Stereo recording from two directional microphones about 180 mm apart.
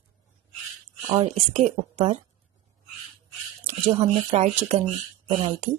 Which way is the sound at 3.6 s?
35° right (ahead or behind).